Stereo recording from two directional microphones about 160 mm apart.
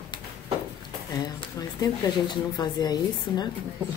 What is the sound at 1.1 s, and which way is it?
Speech, 25° left (ahead or behind).